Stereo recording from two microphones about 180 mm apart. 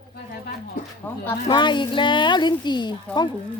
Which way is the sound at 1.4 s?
25° left (ahead or behind).